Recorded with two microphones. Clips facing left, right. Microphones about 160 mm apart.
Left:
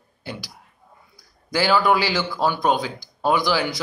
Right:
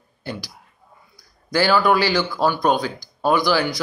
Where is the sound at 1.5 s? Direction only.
15° left (ahead or behind).